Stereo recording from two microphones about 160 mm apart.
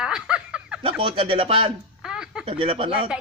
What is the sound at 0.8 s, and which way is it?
Speech, 35° right (ahead or behind).